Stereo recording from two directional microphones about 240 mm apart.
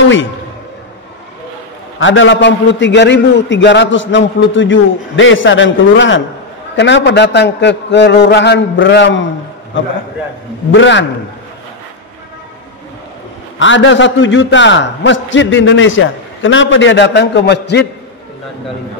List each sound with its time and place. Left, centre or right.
2.0 s a man's voice: left
10.7 s a man's voice: left
13.6 s a man's voice: left